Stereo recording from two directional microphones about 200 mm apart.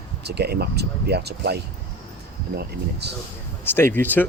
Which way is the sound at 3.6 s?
10° left (ahead or behind).